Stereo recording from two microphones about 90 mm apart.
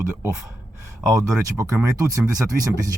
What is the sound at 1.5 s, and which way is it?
Speech, 30° right (ahead or behind).